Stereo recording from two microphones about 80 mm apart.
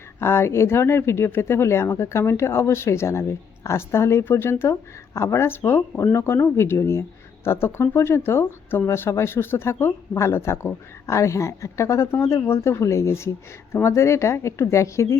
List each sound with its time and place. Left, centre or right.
0.2 s speech: left